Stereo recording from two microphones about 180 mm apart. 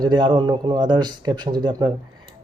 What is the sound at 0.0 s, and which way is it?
Speech, 25° right (ahead or behind).